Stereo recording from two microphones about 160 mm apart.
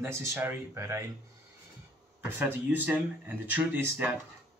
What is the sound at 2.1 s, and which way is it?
Speech, 15° right (ahead or behind).